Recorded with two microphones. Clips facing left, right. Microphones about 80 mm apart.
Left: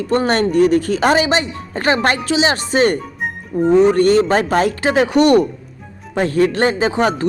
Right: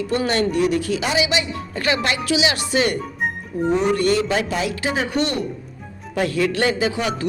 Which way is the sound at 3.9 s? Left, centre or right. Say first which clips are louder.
Left 6 dB; left.